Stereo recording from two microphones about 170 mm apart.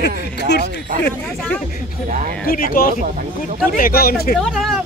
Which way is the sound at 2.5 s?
55° left (ahead or behind).